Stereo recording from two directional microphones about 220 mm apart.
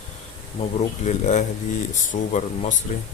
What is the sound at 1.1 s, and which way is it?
Speech, 30° left (ahead or behind).